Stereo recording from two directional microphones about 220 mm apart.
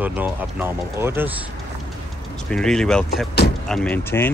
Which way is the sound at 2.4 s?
5° left (ahead or behind).